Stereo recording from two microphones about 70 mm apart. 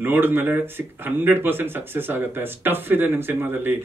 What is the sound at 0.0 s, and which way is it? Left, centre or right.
Speech, right.